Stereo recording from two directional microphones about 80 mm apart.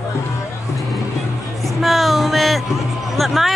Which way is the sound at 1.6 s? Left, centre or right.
Centre.